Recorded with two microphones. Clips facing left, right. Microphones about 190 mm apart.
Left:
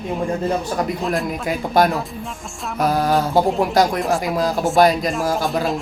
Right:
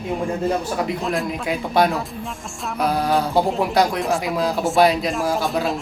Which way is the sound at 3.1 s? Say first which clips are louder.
Left 2 dB; centre (ahead or behind).